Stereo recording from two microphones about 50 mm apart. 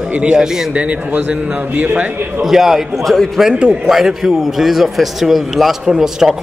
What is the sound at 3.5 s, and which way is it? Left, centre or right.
Speech, right.